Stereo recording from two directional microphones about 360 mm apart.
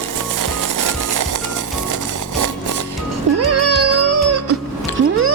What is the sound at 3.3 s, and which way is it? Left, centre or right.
Music, right.